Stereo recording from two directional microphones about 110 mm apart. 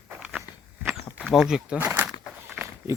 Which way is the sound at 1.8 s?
20° right (ahead or behind).